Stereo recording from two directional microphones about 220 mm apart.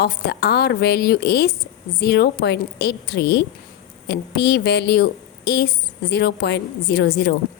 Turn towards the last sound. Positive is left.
turn(degrees=50)  # may be behind; listen again after turning